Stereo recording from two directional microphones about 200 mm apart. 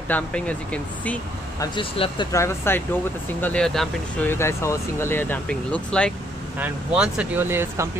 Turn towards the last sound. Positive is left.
turn(degrees=-10)  # may be behind; listen again after turning